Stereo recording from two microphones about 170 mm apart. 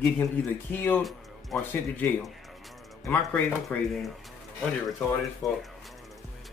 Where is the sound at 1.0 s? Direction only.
Centre (ahead or behind).